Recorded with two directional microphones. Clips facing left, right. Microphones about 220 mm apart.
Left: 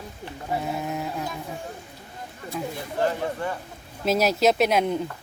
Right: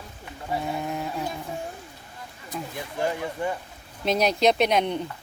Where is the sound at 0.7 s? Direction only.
Centre (ahead or behind).